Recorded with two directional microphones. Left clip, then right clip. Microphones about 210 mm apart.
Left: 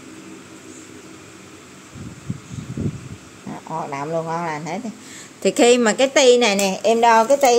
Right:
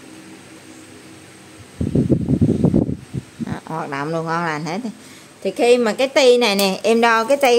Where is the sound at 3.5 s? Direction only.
30° right (ahead or behind).